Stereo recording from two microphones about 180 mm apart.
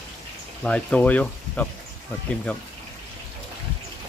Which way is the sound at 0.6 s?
5° left (ahead or behind).